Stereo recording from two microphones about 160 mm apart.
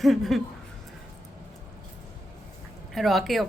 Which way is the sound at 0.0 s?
Centre (ahead or behind).